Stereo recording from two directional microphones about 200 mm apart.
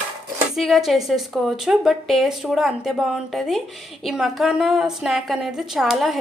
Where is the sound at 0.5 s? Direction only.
Centre (ahead or behind).